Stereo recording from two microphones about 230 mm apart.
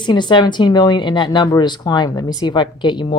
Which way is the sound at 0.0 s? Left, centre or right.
Centre.